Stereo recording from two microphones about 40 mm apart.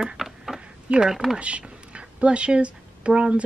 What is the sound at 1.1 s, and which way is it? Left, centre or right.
Speech, centre.